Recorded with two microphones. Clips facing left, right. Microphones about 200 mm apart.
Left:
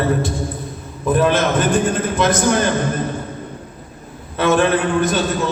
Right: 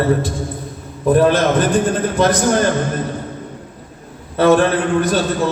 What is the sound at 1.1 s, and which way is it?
A man's voice, 40° right (ahead or behind).